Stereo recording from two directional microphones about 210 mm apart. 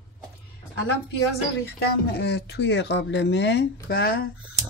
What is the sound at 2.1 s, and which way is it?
Speech, 50° left (ahead or behind).